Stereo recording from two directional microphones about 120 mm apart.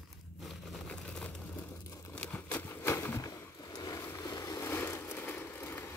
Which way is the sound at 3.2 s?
30° left (ahead or behind).